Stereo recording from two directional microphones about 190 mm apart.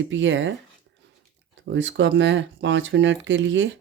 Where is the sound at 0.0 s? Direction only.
80° right.